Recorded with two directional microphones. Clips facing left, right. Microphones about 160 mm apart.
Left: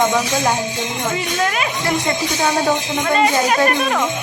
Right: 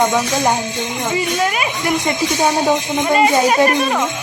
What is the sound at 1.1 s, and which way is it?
Speech, 5° right (ahead or behind).